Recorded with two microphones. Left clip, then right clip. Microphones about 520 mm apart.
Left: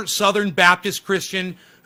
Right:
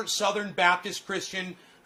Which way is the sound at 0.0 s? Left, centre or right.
Left.